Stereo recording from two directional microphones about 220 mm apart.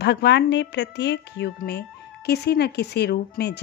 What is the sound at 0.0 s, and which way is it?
A woman's voice, 50° left (ahead or behind).